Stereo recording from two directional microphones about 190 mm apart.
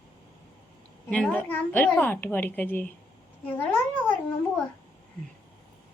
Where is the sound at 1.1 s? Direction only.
5° left (ahead or behind).